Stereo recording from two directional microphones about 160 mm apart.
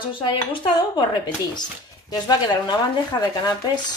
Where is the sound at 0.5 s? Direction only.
30° left (ahead or behind).